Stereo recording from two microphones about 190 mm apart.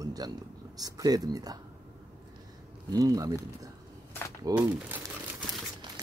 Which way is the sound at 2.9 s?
20° right (ahead or behind).